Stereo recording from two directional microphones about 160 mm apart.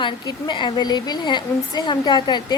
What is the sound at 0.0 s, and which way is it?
Speech, 30° left (ahead or behind).